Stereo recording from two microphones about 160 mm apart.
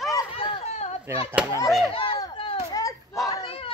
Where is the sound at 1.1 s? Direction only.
15° right (ahead or behind).